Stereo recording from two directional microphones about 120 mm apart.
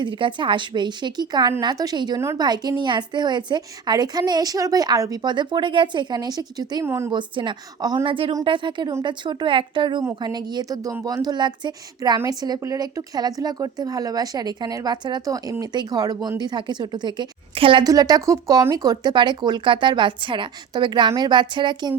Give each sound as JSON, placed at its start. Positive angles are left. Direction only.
{"t": 0.0, "sound": "a woman's voice", "side_deg": -40}
{"t": 6.8, "sound": "a woman's voice", "side_deg": -25}
{"t": 7.1, "sound": "a woman's voice", "side_deg": -40}
{"t": 17.8, "sound": "a woman's voice", "side_deg": -30}